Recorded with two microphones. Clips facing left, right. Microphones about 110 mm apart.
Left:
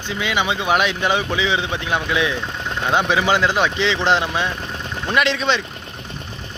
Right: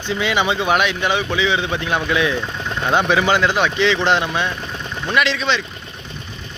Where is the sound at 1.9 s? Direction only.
15° left (ahead or behind).